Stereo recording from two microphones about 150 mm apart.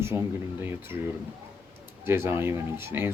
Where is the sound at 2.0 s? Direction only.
15° right (ahead or behind).